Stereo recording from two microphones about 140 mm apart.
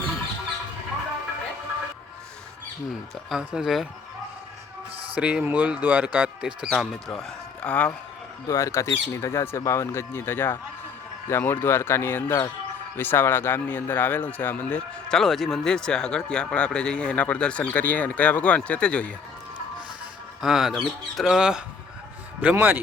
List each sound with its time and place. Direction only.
3.2 s speech: 5° right (ahead or behind)
5.1 s speech: 10° right (ahead or behind)
7.1 s a man's voice: 10° left (ahead or behind)
8.4 s a man's voice: 20° left (ahead or behind)
20.4 s speech: centre (ahead or behind)